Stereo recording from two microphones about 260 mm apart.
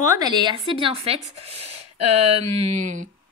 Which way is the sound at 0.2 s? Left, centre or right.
Centre.